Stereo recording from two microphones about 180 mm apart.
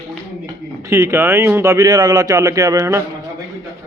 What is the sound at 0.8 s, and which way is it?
Speech, 15° right (ahead or behind).